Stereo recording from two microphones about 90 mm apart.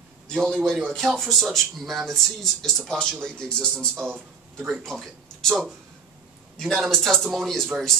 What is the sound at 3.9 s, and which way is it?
Speech, 20° right (ahead or behind).